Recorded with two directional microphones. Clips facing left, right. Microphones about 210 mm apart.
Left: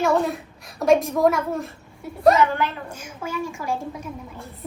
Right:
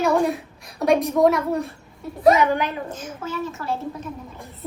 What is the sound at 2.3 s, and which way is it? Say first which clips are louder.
Speech: right 2 dB; 15° right (ahead or behind).